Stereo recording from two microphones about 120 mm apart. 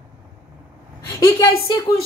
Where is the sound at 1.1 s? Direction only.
35° left (ahead or behind).